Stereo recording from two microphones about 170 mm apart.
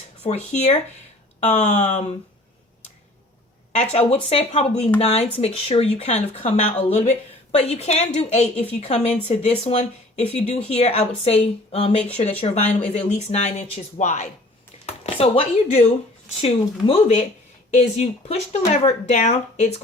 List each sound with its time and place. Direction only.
0.2 s speech: 40° left (ahead or behind)
3.9 s speech: 35° left (ahead or behind)